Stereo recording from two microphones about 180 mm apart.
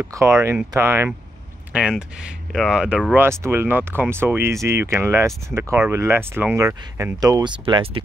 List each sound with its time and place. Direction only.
0.0 s speech: 15° right (ahead or behind)